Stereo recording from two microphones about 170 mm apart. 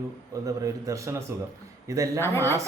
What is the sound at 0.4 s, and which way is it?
A man's voice, 20° right (ahead or behind).